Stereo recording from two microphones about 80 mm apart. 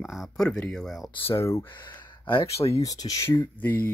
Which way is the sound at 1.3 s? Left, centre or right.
Left.